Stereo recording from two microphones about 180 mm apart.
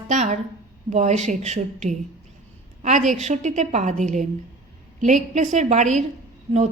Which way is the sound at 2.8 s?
40° right (ahead or behind).